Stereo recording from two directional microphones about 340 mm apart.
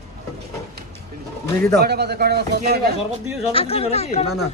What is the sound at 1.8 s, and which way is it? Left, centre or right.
A man's voice, right.